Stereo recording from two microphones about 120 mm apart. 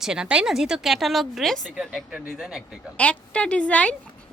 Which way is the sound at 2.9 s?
10° left (ahead or behind).